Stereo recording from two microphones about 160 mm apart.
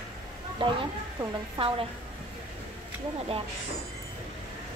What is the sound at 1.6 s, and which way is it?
Speech, 35° right (ahead or behind).